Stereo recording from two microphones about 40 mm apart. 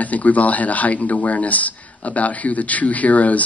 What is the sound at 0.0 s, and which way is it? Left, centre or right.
Speech, left.